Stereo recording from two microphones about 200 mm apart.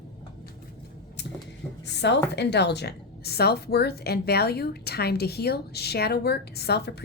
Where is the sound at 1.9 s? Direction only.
60° left (ahead or behind).